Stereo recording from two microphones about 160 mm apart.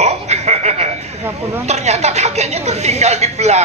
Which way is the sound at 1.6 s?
45° right (ahead or behind).